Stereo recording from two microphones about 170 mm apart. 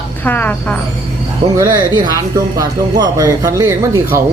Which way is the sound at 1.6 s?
25° right (ahead or behind).